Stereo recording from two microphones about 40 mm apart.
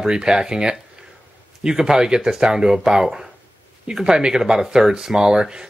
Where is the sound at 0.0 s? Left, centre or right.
Centre.